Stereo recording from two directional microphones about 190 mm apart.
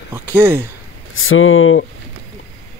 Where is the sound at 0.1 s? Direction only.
10° right (ahead or behind).